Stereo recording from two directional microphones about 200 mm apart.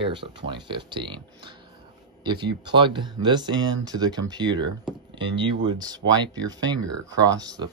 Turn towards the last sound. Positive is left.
turn(degrees=-20)  # may be behind; listen again after turning